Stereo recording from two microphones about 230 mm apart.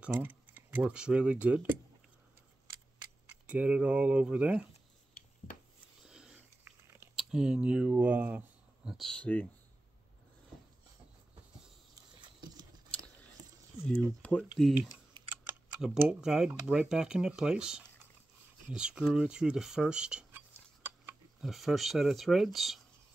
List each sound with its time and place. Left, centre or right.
0.0 s speech: centre
3.4 s speech: centre
6.0 s a sound: centre
7.2 s speech: centre
12.2 s a sound: centre
14.5 s speech: centre